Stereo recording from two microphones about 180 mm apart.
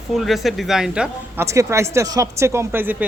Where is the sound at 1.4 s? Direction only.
15° right (ahead or behind).